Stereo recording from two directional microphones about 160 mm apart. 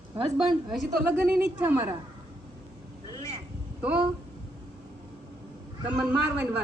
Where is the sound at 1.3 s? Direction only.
15° right (ahead or behind).